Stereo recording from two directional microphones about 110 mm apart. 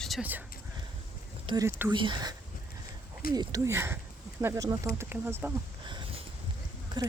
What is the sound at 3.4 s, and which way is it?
Speech, 30° right (ahead or behind).